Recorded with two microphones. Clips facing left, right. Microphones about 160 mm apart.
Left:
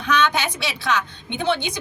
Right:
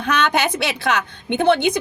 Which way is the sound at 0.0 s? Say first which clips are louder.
Right 2 dB; 60° right (ahead or behind).